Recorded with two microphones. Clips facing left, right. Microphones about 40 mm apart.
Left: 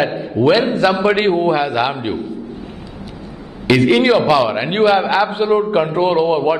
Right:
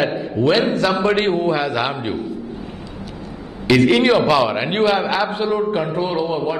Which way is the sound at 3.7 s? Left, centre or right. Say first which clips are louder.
Left 1 dB; centre.